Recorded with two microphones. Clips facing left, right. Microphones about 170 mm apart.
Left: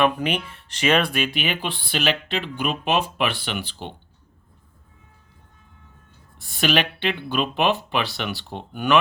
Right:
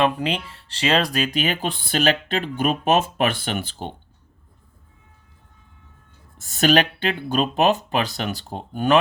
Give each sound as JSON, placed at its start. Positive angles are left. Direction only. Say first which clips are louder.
{"t": 0.0, "sound": "speech", "louder": "even", "side_deg": -30}
{"t": 6.3, "sound": "speech", "louder": "right 4 dB", "side_deg": -45}